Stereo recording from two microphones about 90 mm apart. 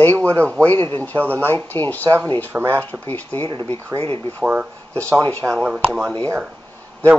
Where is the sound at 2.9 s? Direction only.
20° left (ahead or behind).